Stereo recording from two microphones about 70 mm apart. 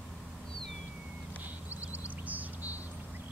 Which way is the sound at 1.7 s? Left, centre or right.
Right.